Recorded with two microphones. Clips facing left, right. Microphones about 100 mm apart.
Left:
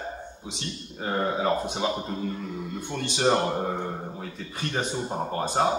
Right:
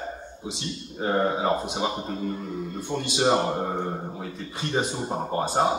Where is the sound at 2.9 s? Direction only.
20° right (ahead or behind).